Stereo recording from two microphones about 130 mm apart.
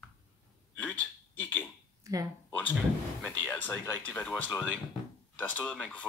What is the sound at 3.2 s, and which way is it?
Speech, 10° left (ahead or behind).